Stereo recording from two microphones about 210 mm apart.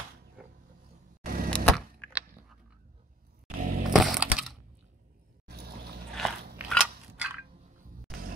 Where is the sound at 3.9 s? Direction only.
Centre (ahead or behind).